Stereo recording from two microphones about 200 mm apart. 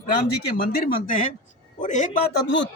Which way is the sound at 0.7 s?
45° left (ahead or behind).